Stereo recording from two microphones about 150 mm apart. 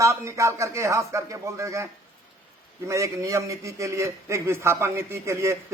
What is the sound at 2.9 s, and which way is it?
A man's voice, 20° right (ahead or behind).